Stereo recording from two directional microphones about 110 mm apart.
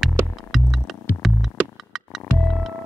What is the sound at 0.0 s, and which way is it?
Music, centre (ahead or behind).